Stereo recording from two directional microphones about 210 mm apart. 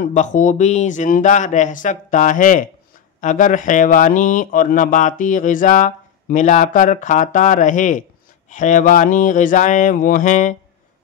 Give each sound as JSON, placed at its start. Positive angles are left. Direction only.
{"t": 0.0, "sound": "speech", "side_deg": 35}